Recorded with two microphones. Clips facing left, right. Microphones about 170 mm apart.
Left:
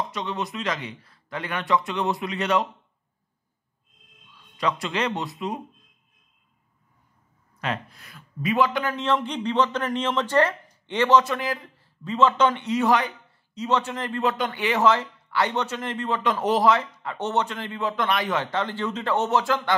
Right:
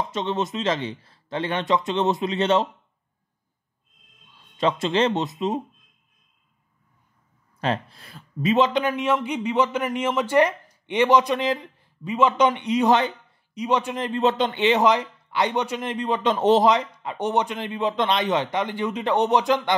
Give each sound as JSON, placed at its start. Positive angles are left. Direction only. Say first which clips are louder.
{"t": 0.1, "sound": "speech", "louder": "right 4 dB", "side_deg": -25}
{"t": 4.6, "sound": "speech", "louder": "right 5 dB", "side_deg": -25}
{"t": 7.6, "sound": "a man's voice", "louder": "right 4 dB", "side_deg": -30}